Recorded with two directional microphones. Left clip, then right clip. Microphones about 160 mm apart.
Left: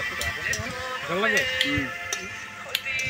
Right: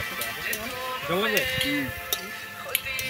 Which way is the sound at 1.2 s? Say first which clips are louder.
Left 4 dB; 45° right (ahead or behind).